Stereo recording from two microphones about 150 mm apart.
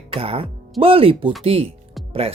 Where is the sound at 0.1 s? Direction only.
40° right (ahead or behind).